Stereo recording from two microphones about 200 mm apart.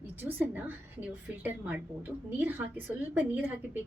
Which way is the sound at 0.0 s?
10° right (ahead or behind).